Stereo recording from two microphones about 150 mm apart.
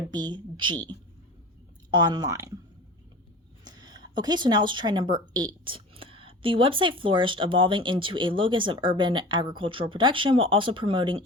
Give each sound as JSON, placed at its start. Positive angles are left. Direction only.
{"t": 0.1, "sound": "speech", "side_deg": -30}
{"t": 1.9, "sound": "speech", "side_deg": -30}
{"t": 3.6, "sound": "speech", "side_deg": -25}